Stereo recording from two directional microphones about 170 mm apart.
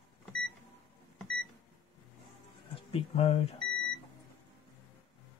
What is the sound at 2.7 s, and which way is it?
Speech, 35° left (ahead or behind).